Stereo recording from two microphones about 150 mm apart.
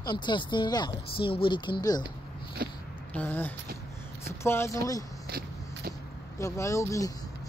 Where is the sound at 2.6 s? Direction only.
90° right.